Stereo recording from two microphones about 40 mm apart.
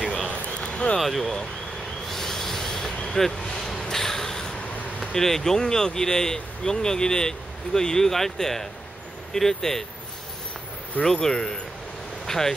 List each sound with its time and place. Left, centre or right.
0.3 s a sound: left
0.9 s speech: centre
2.0 s train: centre
3.2 s a sound: centre
5.1 s speech: centre
11.1 s speech: centre